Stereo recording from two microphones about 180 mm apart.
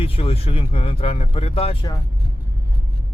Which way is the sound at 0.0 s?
30° left (ahead or behind).